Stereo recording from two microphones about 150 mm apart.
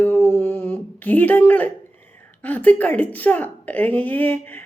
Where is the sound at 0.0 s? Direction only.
15° left (ahead or behind).